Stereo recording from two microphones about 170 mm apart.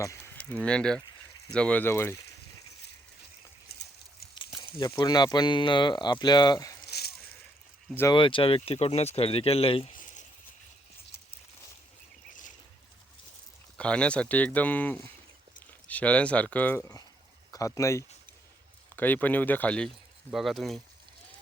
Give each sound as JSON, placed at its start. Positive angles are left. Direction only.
{"t": 0.3, "sound": "speech", "side_deg": 10}
{"t": 3.7, "sound": "a sound", "side_deg": 65}
{"t": 4.8, "sound": "speech", "side_deg": 25}
{"t": 8.1, "sound": "speech", "side_deg": 30}
{"t": 13.7, "sound": "speech", "side_deg": 5}